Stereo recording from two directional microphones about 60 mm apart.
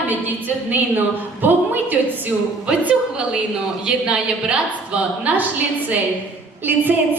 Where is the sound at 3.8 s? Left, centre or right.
Centre.